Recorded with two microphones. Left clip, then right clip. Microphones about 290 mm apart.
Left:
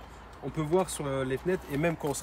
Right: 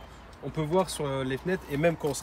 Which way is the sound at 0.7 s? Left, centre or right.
Centre.